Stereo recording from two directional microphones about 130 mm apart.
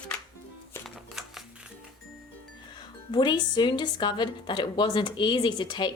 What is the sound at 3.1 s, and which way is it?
A woman's voice, 35° left (ahead or behind).